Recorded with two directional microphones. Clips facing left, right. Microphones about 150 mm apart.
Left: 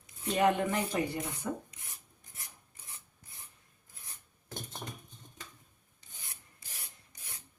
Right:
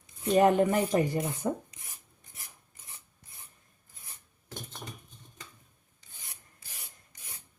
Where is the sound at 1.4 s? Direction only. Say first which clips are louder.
Right 4 dB; 30° right (ahead or behind).